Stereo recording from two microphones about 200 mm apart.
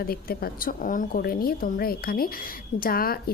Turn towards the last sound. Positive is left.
turn(degrees=50)  # may be behind; listen again after turning